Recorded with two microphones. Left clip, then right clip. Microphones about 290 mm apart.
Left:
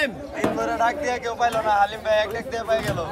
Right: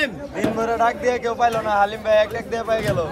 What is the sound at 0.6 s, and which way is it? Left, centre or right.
Speech, centre.